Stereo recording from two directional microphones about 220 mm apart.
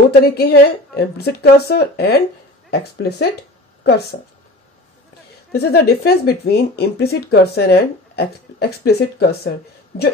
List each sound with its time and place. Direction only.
0.2 s speech: 45° left (ahead or behind)
5.5 s speech: 45° left (ahead or behind)